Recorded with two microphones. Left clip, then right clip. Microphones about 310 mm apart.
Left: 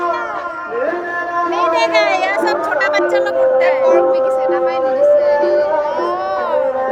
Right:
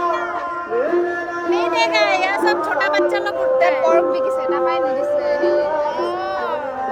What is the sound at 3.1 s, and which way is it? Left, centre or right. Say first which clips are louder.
Music: left 5 dB; centre.